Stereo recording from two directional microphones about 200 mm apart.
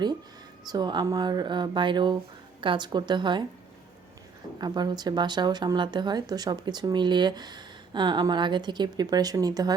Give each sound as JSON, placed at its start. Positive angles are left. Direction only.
{"t": 0.7, "sound": "speech", "side_deg": -20}
{"t": 4.5, "sound": "speech", "side_deg": -20}